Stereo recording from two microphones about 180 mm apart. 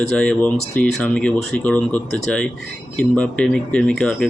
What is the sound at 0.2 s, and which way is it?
Speech, 5° left (ahead or behind).